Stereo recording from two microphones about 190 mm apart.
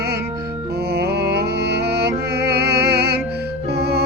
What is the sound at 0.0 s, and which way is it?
Music, 60° right (ahead or behind).